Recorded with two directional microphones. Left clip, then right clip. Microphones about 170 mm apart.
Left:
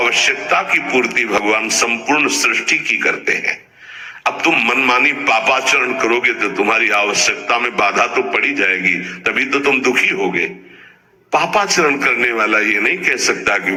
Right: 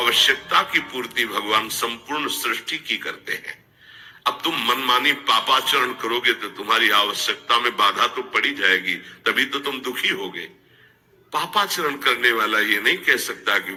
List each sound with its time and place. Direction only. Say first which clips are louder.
0.0 s a man's voice: left 3 dB; 20° right (ahead or behind)